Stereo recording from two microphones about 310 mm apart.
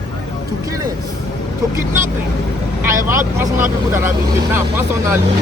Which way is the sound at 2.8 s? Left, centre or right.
Centre.